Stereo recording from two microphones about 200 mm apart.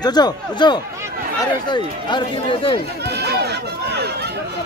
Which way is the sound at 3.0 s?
55° right (ahead or behind).